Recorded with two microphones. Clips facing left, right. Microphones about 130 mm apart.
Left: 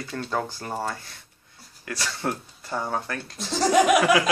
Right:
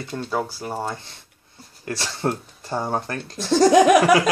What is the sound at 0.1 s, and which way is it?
Speech, 10° right (ahead or behind).